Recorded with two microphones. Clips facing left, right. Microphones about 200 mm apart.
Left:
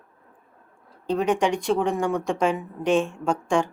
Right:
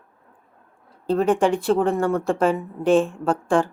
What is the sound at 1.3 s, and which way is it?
Speech, 5° right (ahead or behind).